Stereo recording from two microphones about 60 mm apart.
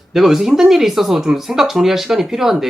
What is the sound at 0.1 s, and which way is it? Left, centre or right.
Speech, centre.